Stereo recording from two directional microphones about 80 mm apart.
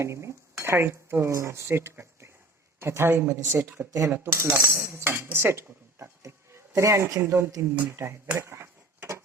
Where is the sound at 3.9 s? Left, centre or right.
Right.